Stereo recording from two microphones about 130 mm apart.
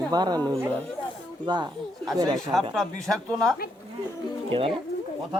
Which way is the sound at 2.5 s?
Centre (ahead or behind).